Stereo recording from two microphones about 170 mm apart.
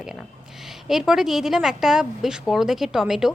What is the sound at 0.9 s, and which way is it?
A woman's voice, centre (ahead or behind).